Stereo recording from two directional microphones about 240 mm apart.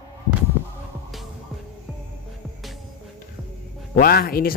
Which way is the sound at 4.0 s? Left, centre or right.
Left.